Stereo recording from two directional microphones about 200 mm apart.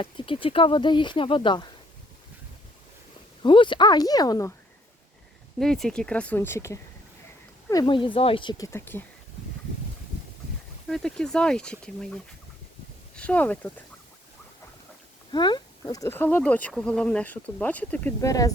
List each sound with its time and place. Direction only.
0.0 s speech: 25° left (ahead or behind)
3.4 s speech: 25° left (ahead or behind)
5.5 s speech: centre (ahead or behind)
10.8 s speech: 5° left (ahead or behind)
13.1 s speech: 5° left (ahead or behind)
15.3 s speech: 20° left (ahead or behind)